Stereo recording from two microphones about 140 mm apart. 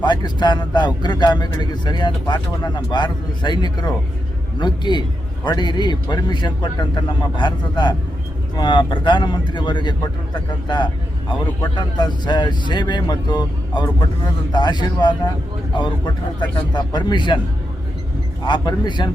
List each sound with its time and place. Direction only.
0.0 s speech: 30° left (ahead or behind)
18.4 s speech: 35° left (ahead or behind)